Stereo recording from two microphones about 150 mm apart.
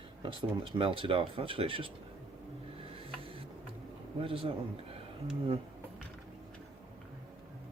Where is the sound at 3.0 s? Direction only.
35° right (ahead or behind).